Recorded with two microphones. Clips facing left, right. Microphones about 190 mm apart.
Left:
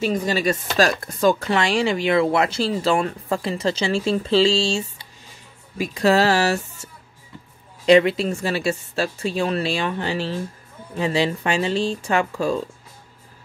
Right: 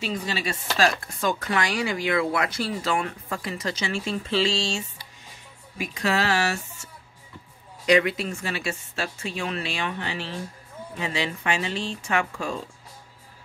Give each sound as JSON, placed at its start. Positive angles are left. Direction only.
{"t": 0.0, "sound": "chopping", "side_deg": 45}
{"t": 0.7, "sound": "speech", "side_deg": 40}